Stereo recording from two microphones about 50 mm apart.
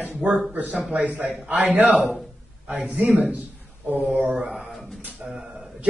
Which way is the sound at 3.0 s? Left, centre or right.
Centre.